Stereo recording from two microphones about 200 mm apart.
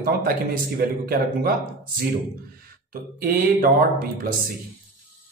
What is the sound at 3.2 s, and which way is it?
Speech, 45° right (ahead or behind).